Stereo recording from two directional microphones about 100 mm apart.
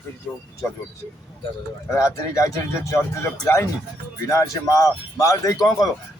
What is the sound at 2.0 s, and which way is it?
Speech, 30° left (ahead or behind).